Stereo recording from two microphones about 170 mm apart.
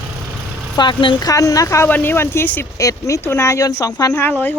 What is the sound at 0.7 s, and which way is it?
Speech, 25° left (ahead or behind).